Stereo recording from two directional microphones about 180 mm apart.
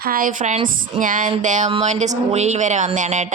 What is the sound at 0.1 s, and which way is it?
A woman's voice, 50° right (ahead or behind).